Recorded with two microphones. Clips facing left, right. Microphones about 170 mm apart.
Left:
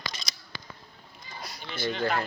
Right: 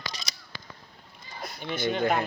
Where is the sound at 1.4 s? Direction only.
50° right (ahead or behind).